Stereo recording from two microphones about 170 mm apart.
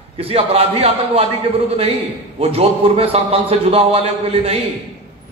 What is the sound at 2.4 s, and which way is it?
A man's voice, 35° right (ahead or behind).